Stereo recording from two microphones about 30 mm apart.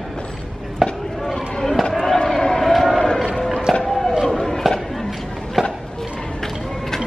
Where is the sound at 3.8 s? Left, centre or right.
Centre.